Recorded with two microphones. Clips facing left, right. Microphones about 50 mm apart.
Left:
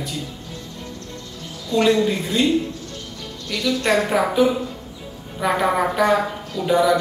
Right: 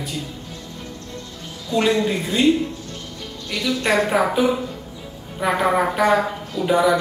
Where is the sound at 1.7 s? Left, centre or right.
Centre.